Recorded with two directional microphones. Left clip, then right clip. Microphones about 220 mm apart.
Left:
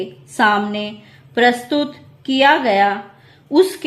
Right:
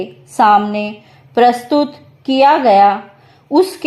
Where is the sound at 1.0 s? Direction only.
20° right (ahead or behind).